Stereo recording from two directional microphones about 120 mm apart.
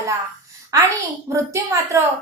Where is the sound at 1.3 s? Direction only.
25° right (ahead or behind).